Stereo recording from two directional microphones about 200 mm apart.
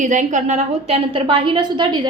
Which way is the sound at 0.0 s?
35° right (ahead or behind).